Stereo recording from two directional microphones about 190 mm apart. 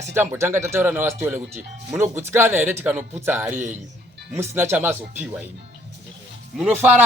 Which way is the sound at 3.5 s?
40° right (ahead or behind).